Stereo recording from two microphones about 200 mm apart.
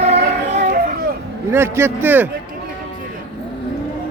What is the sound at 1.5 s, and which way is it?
Speech, 15° right (ahead or behind).